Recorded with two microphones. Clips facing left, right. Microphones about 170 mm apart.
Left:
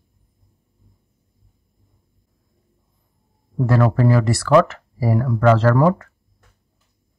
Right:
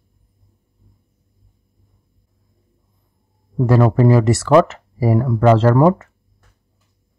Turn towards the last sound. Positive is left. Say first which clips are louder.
# right 3 dB
turn(degrees=-25)  # may be behind; listen again after turning